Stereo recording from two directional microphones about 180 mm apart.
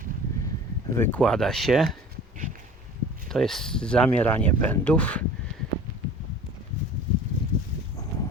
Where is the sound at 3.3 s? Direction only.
Centre (ahead or behind).